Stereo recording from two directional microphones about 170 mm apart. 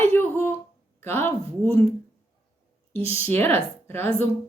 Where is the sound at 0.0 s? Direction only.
10° left (ahead or behind).